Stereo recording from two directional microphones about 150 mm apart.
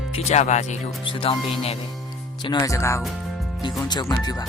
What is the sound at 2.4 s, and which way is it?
Speech, 30° left (ahead or behind).